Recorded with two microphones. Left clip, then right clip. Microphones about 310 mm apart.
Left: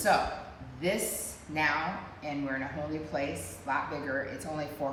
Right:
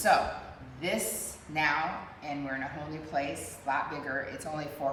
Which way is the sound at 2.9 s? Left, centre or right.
Centre.